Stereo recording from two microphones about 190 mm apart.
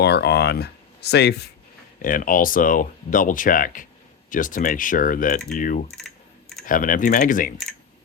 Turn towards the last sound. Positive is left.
turn(degrees=45)  # may be behind; listen again after turning